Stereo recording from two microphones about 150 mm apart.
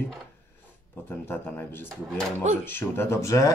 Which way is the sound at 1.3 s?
10° left (ahead or behind).